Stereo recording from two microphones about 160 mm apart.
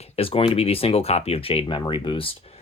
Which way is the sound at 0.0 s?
35° left (ahead or behind).